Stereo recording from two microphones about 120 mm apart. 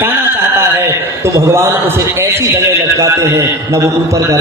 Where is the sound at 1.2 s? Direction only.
25° right (ahead or behind).